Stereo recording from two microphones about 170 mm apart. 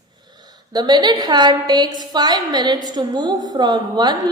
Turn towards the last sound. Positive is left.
turn(degrees=-25)  # may be behind; listen again after turning